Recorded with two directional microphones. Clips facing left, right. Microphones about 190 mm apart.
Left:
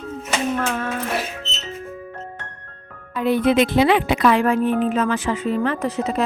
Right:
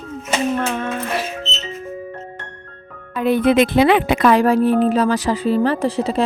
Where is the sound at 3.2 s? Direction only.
55° right (ahead or behind).